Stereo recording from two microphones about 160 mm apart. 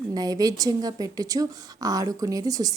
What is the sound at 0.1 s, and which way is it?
A woman's voice, 25° right (ahead or behind).